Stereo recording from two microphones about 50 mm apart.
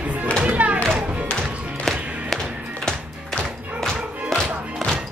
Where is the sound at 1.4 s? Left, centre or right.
Centre.